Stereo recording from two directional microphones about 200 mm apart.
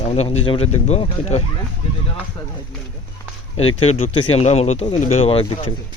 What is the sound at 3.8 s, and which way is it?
Speech, 30° left (ahead or behind).